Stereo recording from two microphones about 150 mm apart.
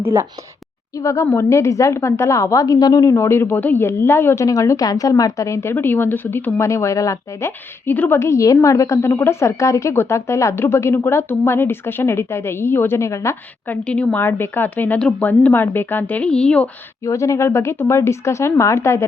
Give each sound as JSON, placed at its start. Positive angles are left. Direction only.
{"t": 0.0, "sound": "a woman's voice", "side_deg": -15}
{"t": 0.9, "sound": "a woman's voice", "side_deg": 20}
{"t": 13.8, "sound": "a woman's voice", "side_deg": 10}
{"t": 17.0, "sound": "a woman's voice", "side_deg": 20}